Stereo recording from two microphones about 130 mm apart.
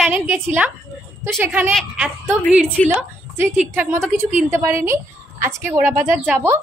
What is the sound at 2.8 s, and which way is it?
Speech, 10° left (ahead or behind).